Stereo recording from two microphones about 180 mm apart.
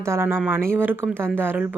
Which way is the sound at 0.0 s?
15° right (ahead or behind).